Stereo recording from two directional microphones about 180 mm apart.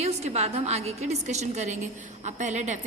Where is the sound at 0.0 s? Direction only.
35° right (ahead or behind).